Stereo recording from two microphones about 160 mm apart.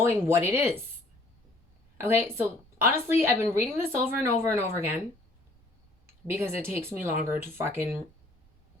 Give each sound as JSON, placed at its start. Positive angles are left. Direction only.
{"t": 0.0, "sound": "speech", "side_deg": -15}
{"t": 2.0, "sound": "speech", "side_deg": -15}
{"t": 6.3, "sound": "speech", "side_deg": -15}